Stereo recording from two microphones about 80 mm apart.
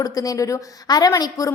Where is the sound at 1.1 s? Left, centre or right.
Left.